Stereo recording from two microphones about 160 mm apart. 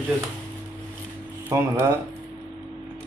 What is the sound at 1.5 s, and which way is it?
Speech, 15° right (ahead or behind).